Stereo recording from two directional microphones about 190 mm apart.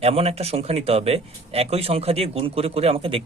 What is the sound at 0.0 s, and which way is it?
Speech, 30° right (ahead or behind).